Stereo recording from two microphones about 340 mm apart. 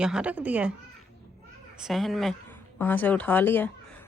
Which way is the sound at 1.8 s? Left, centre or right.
Centre.